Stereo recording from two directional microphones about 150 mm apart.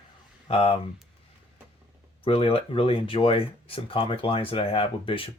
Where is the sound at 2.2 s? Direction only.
40° left (ahead or behind).